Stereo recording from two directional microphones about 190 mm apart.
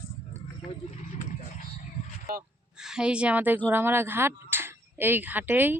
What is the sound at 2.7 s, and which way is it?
A woman's voice, 5° right (ahead or behind).